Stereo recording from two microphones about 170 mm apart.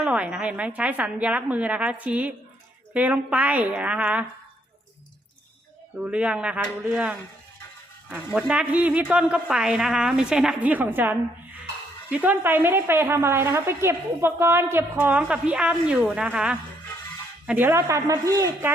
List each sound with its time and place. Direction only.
0.0 s a woman's voice: 5° right (ahead or behind)
6.0 s a woman's voice: 5° right (ahead or behind)